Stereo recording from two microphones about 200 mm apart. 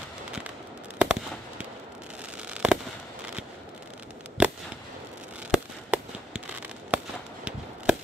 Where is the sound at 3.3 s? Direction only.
5° right (ahead or behind).